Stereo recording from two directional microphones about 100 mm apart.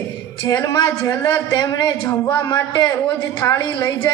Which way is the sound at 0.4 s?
40° left (ahead or behind).